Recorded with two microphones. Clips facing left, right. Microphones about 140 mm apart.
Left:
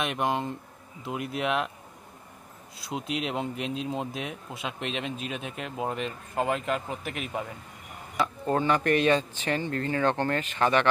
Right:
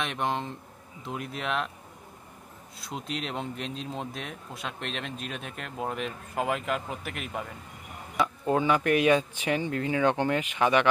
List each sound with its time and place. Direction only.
0.0 s speech: 5° left (ahead or behind)
2.8 s speech: 5° left (ahead or behind)